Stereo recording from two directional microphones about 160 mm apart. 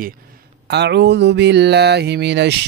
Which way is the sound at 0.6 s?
90° right.